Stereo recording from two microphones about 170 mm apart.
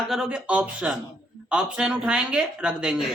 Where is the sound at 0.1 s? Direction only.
5° right (ahead or behind).